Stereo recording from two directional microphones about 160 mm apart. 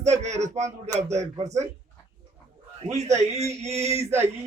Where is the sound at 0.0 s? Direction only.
45° right (ahead or behind).